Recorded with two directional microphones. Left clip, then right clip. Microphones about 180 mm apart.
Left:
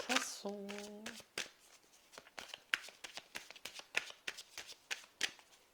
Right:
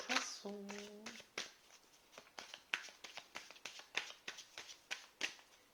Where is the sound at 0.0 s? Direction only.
50° left (ahead or behind).